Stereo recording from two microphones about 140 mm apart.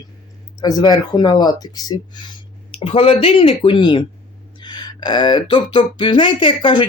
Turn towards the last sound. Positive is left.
turn(degrees=35)  # may be behind; listen again after turning